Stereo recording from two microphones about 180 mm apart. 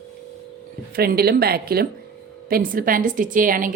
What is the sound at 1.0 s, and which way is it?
A woman's voice, 60° right (ahead or behind).